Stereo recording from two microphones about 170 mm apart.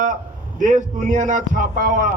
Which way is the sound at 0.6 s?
50° right (ahead or behind).